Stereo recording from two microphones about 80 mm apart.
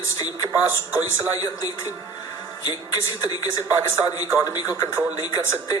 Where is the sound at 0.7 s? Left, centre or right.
Right.